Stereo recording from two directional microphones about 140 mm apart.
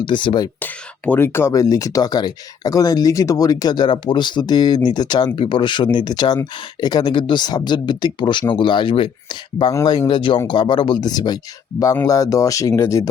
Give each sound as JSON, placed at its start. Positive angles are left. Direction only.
{"t": 0.0, "sound": "speech", "side_deg": 35}
{"t": 0.6, "sound": "speech", "side_deg": 10}